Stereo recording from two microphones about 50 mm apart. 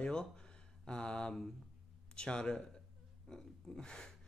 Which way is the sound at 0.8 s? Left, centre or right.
Centre.